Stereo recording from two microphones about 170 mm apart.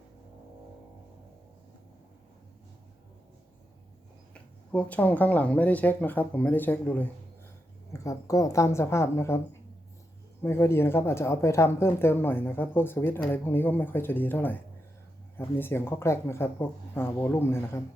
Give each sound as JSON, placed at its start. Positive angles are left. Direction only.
{"t": 4.7, "sound": "speech", "side_deg": 10}